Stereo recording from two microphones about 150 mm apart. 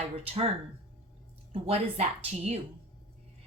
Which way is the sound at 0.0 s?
45° right (ahead or behind).